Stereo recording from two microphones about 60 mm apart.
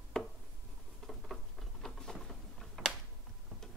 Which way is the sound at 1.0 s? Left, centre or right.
Centre.